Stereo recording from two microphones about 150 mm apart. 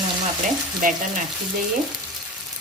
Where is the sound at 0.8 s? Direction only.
65° right (ahead or behind).